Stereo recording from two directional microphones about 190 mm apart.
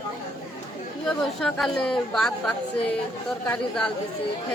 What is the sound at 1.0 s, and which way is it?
A woman's voice, 5° left (ahead or behind).